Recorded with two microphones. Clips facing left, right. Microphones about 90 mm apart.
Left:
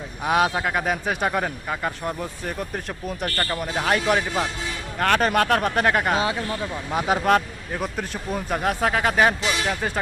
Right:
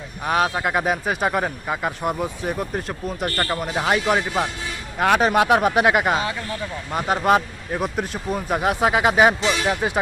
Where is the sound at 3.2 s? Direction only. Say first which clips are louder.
Right 3 dB; 15° right (ahead or behind).